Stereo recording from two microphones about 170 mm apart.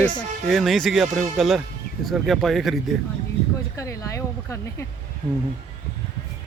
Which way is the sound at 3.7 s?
20° left (ahead or behind).